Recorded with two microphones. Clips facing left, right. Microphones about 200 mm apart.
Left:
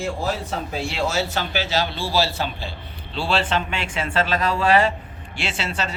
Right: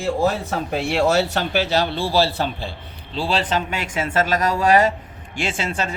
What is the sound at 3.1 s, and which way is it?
Speech, 40° right (ahead or behind).